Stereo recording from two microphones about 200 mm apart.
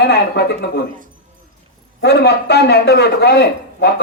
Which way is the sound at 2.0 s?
55° left (ahead or behind).